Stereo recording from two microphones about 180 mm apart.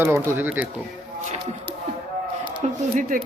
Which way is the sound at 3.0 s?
50° right (ahead or behind).